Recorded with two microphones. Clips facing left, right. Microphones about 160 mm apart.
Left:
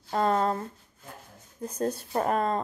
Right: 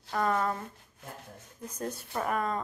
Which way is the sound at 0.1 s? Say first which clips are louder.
Left 4 dB; 30° left (ahead or behind).